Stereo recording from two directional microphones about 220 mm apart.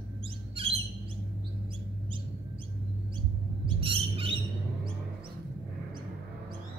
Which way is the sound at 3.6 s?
25° right (ahead or behind).